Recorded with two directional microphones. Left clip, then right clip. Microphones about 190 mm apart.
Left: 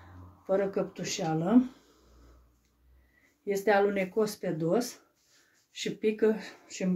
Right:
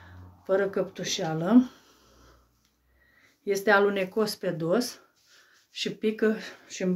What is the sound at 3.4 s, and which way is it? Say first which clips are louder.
Speech: right 3 dB; 25° right (ahead or behind).